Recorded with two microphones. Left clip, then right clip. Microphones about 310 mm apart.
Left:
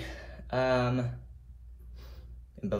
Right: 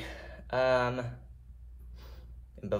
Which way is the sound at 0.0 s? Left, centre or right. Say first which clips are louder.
Even; right.